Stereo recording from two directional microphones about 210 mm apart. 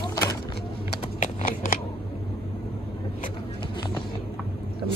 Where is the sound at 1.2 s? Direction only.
40° left (ahead or behind).